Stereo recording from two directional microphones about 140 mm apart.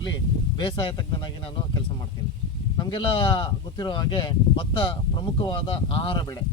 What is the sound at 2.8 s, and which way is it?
Speech, 35° left (ahead or behind).